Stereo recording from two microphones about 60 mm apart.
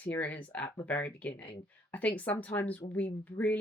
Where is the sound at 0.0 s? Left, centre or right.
Left.